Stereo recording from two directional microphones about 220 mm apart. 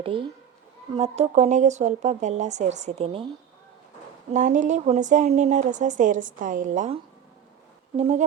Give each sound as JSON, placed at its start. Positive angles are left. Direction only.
{"t": 0.0, "sound": "a woman's voice", "side_deg": -25}
{"t": 4.3, "sound": "a woman's voice", "side_deg": -35}